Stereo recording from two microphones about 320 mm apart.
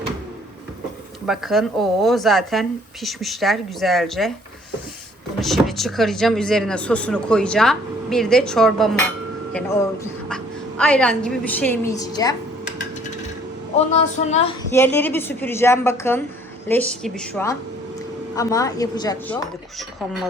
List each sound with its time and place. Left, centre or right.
1.3 s speech: centre
5.4 s a woman's voice: centre
13.7 s speech: centre
14.7 s a woman's voice: centre